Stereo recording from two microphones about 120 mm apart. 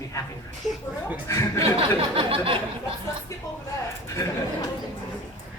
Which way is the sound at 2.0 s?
50° right (ahead or behind).